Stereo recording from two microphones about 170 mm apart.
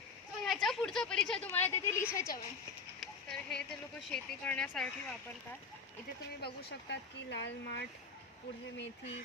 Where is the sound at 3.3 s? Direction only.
5° left (ahead or behind).